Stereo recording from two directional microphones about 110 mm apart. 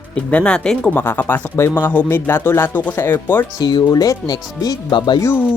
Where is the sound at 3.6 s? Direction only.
40° left (ahead or behind).